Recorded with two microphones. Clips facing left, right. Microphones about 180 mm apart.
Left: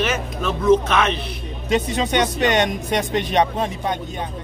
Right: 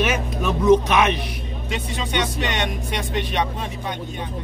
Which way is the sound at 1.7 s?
45° left (ahead or behind).